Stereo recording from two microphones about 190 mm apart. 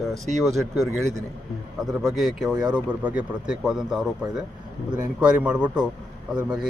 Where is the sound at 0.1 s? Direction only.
Centre (ahead or behind).